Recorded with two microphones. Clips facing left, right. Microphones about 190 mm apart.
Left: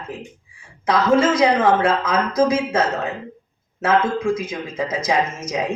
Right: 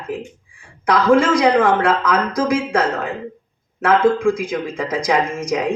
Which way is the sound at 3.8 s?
25° left (ahead or behind).